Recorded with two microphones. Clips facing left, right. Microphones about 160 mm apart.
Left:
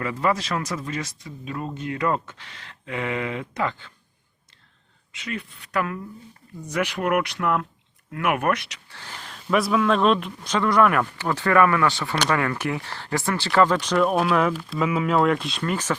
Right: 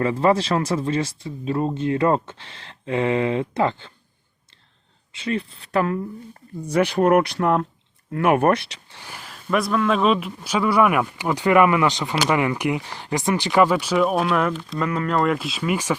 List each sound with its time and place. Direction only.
0.0 s speech: 30° right (ahead or behind)
5.1 s speech: 30° right (ahead or behind)
8.9 s speech: 15° right (ahead or behind)
9.3 s speech: centre (ahead or behind)